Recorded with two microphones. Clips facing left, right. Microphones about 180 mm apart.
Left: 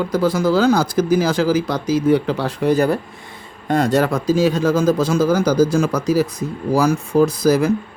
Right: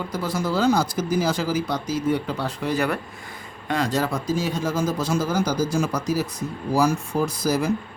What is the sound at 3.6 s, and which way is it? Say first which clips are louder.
Speech: left 7 dB; 60° left (ahead or behind).